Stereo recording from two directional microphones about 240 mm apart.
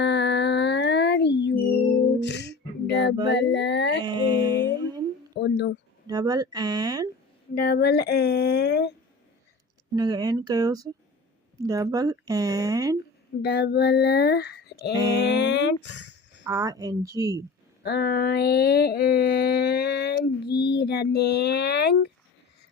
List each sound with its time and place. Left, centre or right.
0.0 s a sound: left
2.2 s music: left
3.2 s speech: left
4.0 s music: centre
5.3 s speech: left
6.1 s speech: centre
7.5 s speech: left
9.9 s speech: centre
13.4 s mantra: left
15.2 s speech: left
16.4 s speech: centre
17.8 s mantra: left
20.6 s speech: left